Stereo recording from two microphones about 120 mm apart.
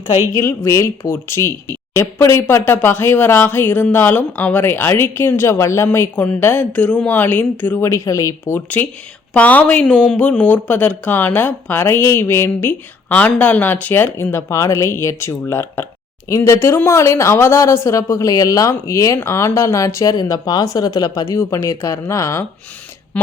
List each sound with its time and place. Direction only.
0.3 s speech: 25° left (ahead or behind)
8.5 s speech: 15° left (ahead or behind)
23.1 s speech: 10° left (ahead or behind)